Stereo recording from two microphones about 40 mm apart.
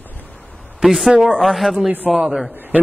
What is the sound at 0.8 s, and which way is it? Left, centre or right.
A man's voice, centre.